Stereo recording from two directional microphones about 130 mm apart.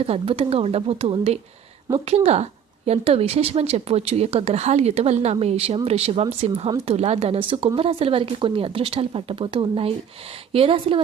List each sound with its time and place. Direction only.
0.0 s a woman's voice: 50° right (ahead or behind)